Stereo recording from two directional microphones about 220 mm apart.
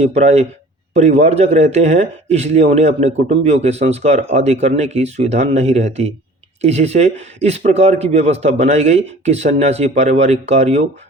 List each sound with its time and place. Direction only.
0.0 s speech: 30° right (ahead or behind)